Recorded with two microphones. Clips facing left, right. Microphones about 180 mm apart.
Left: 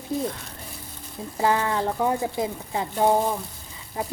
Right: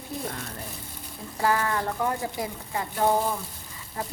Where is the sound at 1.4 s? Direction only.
20° left (ahead or behind).